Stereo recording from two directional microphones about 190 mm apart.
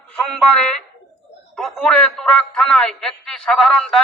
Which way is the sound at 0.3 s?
Centre (ahead or behind).